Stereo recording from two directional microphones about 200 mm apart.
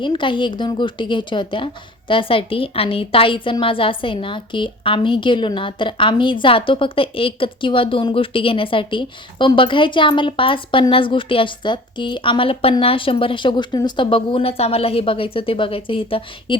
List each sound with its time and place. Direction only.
0.0 s a woman's voice: 25° left (ahead or behind)